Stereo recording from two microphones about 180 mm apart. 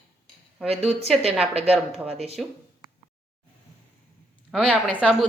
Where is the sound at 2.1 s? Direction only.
35° right (ahead or behind).